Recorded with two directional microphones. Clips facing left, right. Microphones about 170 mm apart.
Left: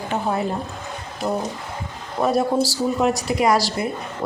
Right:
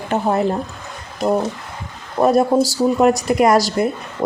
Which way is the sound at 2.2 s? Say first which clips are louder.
Right 5 dB; 50° right (ahead or behind).